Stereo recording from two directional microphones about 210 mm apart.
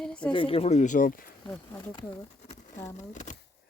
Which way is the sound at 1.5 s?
10° left (ahead or behind).